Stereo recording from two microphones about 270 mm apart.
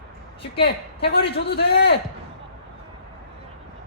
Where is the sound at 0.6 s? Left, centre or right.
Left.